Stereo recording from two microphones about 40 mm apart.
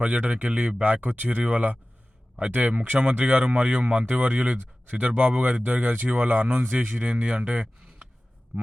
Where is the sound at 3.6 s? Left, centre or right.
Right.